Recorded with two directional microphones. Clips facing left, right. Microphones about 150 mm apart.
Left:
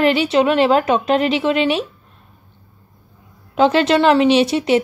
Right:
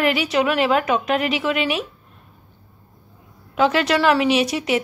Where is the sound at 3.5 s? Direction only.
30° left (ahead or behind).